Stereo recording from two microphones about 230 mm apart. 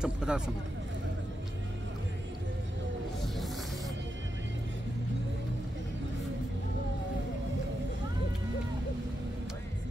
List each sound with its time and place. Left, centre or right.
0.0 s speech: centre